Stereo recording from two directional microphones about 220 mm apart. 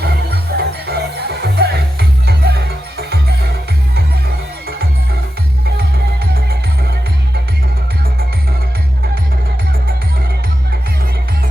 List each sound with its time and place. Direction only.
0.0 s music: 45° right (ahead or behind)